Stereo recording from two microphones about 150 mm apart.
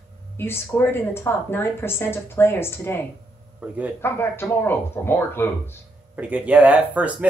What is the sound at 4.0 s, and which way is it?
Speech, 15° left (ahead or behind).